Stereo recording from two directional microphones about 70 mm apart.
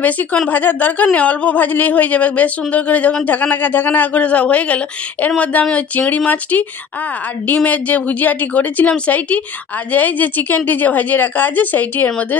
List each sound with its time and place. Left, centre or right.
0.0 s a woman's voice: left